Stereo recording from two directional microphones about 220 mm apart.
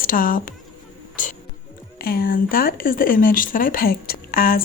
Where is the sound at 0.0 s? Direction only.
40° left (ahead or behind).